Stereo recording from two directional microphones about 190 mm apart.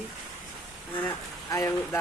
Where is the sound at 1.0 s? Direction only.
10° left (ahead or behind).